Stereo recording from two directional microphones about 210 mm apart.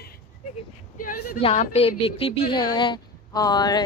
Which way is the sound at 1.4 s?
30° left (ahead or behind).